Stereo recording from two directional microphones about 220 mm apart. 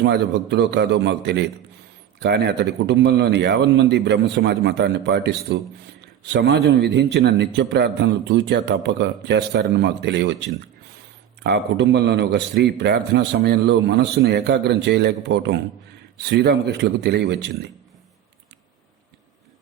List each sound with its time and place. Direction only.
0.0 s a man's voice: 50° right (ahead or behind)
11.4 s a man's voice: 50° right (ahead or behind)